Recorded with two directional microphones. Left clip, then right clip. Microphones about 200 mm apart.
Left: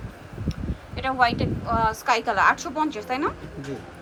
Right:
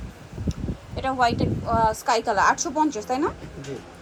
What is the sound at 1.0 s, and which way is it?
Speech, 20° right (ahead or behind).